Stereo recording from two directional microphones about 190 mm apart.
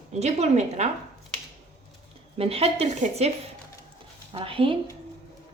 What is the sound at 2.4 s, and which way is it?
Speech, 30° right (ahead or behind).